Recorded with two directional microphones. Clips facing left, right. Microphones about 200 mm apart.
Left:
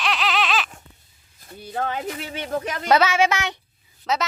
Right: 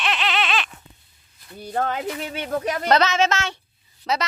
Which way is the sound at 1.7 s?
50° right (ahead or behind).